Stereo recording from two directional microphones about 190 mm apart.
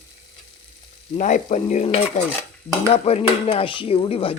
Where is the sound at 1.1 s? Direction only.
40° left (ahead or behind).